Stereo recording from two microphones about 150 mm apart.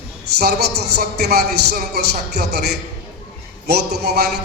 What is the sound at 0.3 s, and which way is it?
A man's voice, 90° right.